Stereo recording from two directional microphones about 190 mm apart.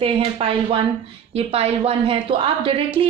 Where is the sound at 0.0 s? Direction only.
30° right (ahead or behind).